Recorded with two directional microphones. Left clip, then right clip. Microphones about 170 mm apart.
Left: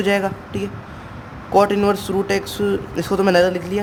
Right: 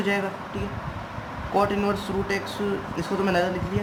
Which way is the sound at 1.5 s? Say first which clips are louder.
Left 8 dB; 75° left (ahead or behind).